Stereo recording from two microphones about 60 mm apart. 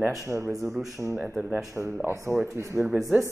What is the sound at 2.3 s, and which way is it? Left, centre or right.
Speech, right.